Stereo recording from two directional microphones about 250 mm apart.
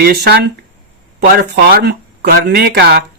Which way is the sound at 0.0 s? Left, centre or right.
Right.